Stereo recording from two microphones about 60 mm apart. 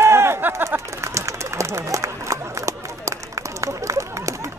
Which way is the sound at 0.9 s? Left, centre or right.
Right.